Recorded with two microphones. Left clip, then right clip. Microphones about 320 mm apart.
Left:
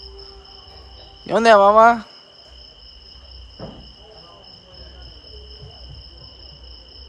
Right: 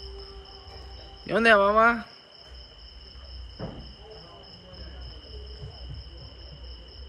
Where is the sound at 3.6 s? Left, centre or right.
Left.